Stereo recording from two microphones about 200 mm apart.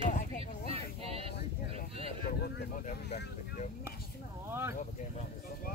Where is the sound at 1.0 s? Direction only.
30° right (ahead or behind).